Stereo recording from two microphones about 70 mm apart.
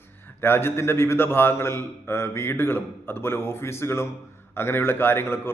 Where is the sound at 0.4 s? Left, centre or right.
Left.